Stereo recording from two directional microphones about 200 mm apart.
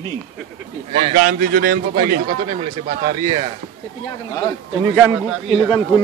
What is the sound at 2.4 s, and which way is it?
Speech, 30° right (ahead or behind).